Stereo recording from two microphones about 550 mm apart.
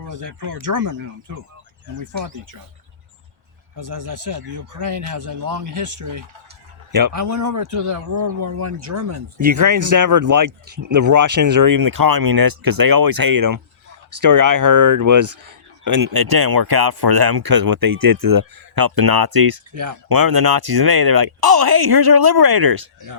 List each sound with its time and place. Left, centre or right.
0.0 s speech: right
3.8 s speech: right